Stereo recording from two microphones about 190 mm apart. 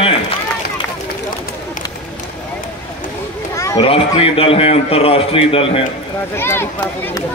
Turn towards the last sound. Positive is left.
turn(degrees=10)  # may be behind; listen again after turning